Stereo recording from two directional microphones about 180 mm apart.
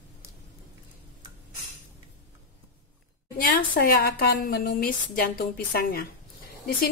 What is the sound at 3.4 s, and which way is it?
A woman's voice, 55° left (ahead or behind).